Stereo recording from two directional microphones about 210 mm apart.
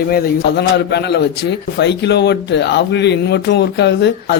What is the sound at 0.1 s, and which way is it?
Speech, 50° left (ahead or behind).